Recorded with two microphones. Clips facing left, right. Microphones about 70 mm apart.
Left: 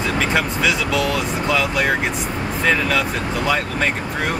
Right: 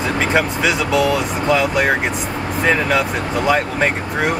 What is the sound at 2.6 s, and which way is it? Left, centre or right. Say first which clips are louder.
Speech: right 2 dB; centre.